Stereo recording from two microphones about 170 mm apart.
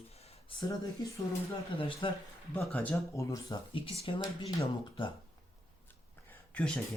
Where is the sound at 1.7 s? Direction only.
30° left (ahead or behind).